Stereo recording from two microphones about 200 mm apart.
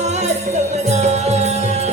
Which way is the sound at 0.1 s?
35° right (ahead or behind).